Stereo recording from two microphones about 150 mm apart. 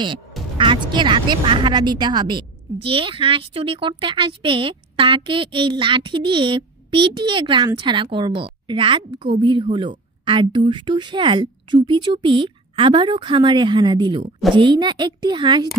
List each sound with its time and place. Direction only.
0.6 s a woman's voice: 30° right (ahead or behind)